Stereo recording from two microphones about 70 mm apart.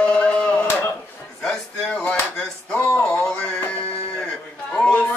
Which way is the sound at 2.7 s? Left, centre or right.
Centre.